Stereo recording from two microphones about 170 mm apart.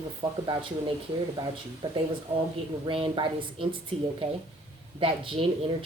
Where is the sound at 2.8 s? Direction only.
30° right (ahead or behind).